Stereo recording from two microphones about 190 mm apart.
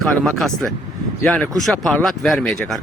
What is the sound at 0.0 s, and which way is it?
Speech, centre (ahead or behind).